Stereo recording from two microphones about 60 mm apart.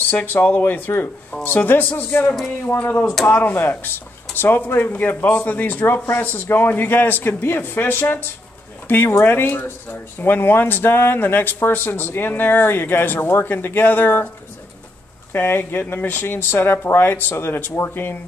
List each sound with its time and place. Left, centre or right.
0.1 s a man's voice: left
15.3 s speech: left